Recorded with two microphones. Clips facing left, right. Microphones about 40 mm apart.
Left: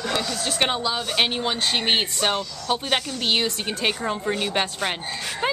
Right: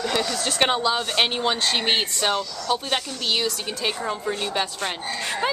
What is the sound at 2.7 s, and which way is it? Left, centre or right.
Speech, left.